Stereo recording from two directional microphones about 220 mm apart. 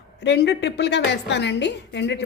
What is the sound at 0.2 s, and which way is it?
A woman's voice, 50° left (ahead or behind).